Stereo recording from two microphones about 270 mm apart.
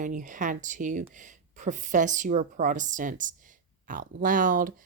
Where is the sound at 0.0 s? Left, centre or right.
Right.